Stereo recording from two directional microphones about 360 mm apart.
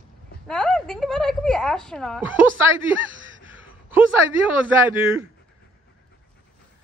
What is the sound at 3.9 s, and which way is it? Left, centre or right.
Speech, centre.